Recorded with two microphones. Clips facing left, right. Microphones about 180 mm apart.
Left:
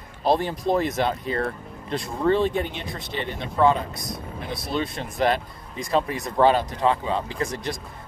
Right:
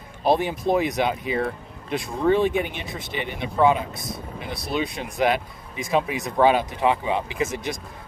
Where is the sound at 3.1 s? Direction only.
10° right (ahead or behind).